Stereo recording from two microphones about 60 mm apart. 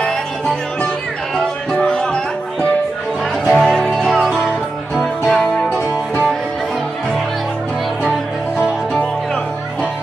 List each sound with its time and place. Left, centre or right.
1.7 s music: centre
8.0 s music: centre